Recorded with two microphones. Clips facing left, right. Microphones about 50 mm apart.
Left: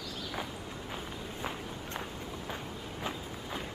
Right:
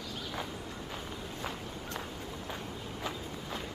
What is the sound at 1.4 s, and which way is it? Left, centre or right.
Run, centre.